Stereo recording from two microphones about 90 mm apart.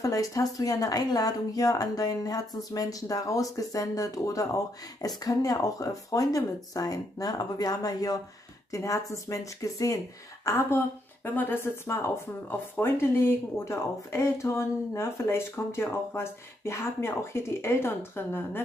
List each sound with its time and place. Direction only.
0.0 s speech: 40° left (ahead or behind); by 18.6 s 25° left (ahead or behind)